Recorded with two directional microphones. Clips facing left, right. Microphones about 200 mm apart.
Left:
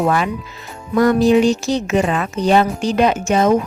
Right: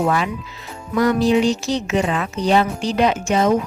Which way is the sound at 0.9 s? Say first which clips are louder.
Left 3 dB; 50° left (ahead or behind).